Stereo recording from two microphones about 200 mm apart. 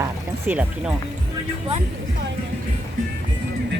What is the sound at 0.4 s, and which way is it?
Speech, 5° right (ahead or behind).